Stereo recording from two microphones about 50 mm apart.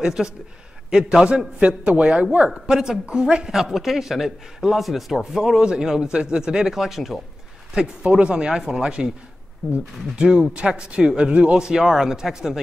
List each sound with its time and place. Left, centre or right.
0.0 s speech: centre
1.9 s speech: right
3.5 s a man's voice: centre
6.8 s a man's voice: centre
7.7 s speech: centre
10.1 s speech: right